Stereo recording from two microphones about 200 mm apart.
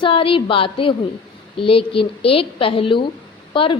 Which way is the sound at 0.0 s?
25° left (ahead or behind).